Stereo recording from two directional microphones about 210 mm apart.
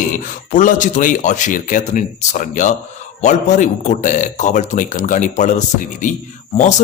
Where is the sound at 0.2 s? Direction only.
35° left (ahead or behind).